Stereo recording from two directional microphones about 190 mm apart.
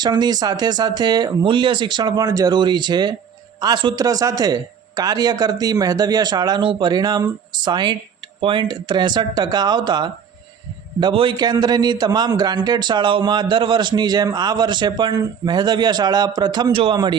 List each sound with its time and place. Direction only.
0.0 s a man's voice: 20° right (ahead or behind)